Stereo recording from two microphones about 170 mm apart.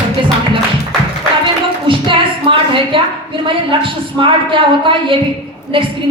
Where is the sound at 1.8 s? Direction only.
30° right (ahead or behind).